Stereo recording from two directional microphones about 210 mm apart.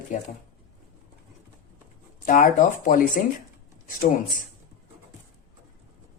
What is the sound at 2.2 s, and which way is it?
Speech, 40° left (ahead or behind).